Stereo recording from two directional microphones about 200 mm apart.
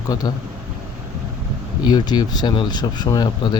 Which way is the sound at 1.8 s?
20° left (ahead or behind).